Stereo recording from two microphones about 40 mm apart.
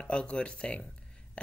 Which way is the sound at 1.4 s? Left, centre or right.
Left.